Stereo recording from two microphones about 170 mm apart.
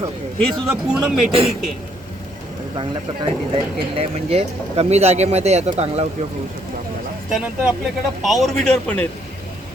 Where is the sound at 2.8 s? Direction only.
30° right (ahead or behind).